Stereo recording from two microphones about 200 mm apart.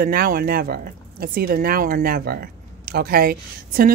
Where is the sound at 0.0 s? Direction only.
45° right (ahead or behind).